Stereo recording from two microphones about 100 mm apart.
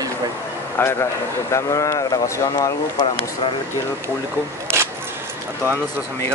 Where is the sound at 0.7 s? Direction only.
25° left (ahead or behind).